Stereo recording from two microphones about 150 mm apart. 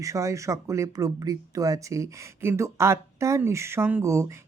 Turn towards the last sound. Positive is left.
turn(degrees=-20)  # may be behind; listen again after turning